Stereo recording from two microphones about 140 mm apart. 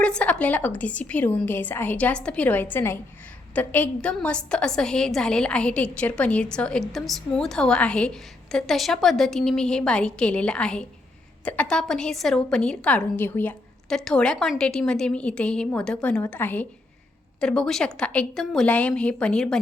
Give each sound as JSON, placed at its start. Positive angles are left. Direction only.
{"t": 0.0, "sound": "a woman's voice", "side_deg": 10}